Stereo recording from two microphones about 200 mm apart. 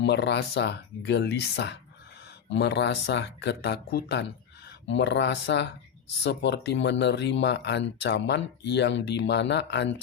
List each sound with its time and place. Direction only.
0.0 s speech: 60° left (ahead or behind)